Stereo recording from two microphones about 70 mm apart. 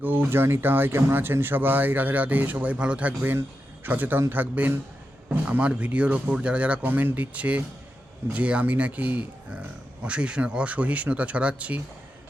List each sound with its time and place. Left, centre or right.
0.0 s speech: right